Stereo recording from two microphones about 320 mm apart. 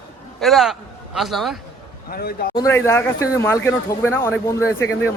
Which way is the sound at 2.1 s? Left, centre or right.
Left.